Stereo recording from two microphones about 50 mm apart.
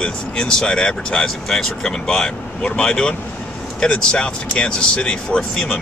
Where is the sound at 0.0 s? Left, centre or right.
Centre.